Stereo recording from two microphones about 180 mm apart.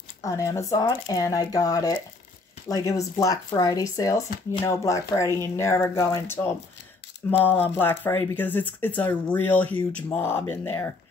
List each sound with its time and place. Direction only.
0.2 s speech: 15° left (ahead or behind)